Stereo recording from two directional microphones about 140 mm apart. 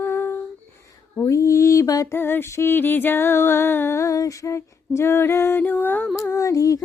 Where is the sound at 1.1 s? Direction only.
20° left (ahead or behind).